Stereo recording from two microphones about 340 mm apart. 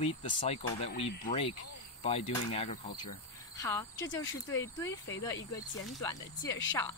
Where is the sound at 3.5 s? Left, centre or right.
Centre.